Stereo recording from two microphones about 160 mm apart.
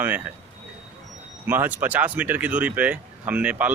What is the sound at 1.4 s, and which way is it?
Speech, 10° right (ahead or behind).